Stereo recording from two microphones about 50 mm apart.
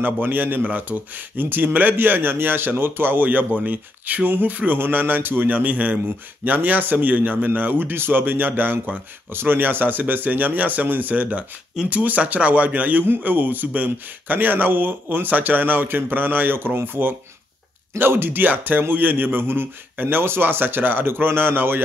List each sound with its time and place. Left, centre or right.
0.0 s a man's voice: right